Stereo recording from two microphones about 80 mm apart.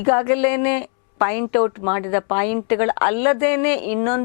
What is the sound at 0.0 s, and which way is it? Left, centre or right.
A woman's voice, centre.